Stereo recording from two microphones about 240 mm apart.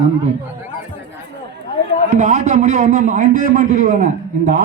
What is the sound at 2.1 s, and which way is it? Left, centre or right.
A man's voice, right.